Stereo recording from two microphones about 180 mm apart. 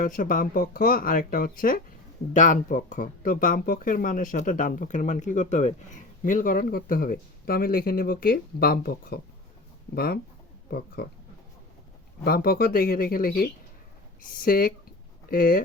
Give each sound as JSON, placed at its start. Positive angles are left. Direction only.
{"t": 0.0, "sound": "speech", "side_deg": 50}
{"t": 12.2, "sound": "speech", "side_deg": 55}